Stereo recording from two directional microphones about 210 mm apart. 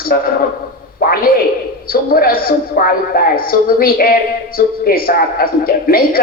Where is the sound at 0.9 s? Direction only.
45° left (ahead or behind).